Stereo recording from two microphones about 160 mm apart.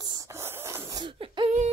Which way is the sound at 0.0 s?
20° right (ahead or behind).